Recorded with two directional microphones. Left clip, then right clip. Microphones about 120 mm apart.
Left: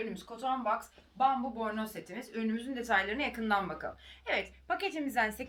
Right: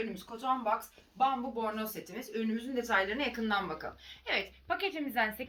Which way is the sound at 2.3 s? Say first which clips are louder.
Right 2 dB; 90° left.